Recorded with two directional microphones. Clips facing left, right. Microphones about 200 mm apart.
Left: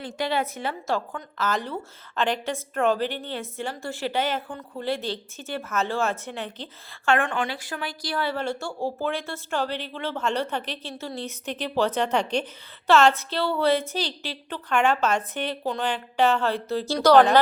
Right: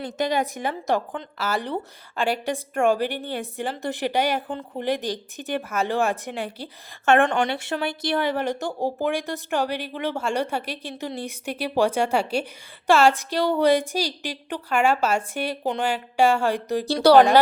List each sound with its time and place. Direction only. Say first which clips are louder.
0.3 s speech: even; 15° right (ahead or behind)
7.7 s speech: right 6 dB; 35° right (ahead or behind)
8.0 s speech: right 2 dB; 20° right (ahead or behind)